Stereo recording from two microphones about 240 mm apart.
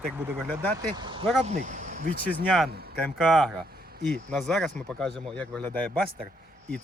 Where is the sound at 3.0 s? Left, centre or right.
Centre.